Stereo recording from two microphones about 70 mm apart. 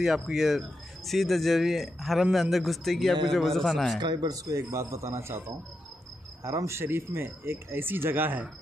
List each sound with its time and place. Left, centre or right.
0.0 s speech: centre
4.0 s speech: right
4.6 s a man's voice: right
6.4 s speech: right